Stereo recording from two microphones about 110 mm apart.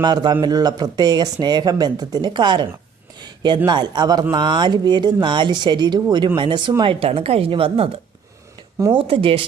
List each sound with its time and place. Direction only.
0.0 s speech: 40° right (ahead or behind)
3.2 s a sound: 45° right (ahead or behind)
3.7 s speech: 45° right (ahead or behind)
9.0 s speech: 55° right (ahead or behind)